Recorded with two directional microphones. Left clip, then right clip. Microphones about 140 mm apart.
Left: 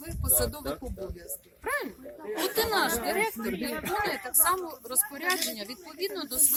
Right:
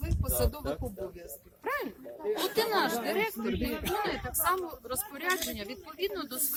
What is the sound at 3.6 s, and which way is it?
Speech, 90° right.